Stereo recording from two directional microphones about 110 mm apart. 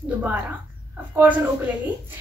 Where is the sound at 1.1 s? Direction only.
15° right (ahead or behind).